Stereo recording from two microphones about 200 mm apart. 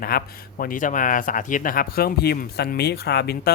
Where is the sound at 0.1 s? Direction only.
50° left (ahead or behind).